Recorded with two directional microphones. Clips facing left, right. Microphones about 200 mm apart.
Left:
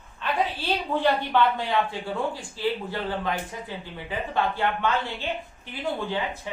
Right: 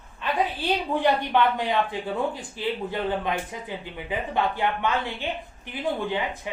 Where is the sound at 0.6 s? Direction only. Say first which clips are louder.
Right 1 dB; 15° right (ahead or behind).